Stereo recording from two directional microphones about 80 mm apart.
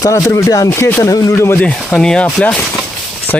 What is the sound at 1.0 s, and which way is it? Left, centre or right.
Speech, left.